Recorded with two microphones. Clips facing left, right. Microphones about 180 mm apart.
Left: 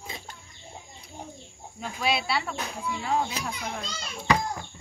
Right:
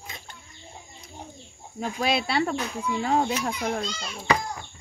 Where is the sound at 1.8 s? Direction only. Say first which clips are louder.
Right 3 dB; 45° right (ahead or behind).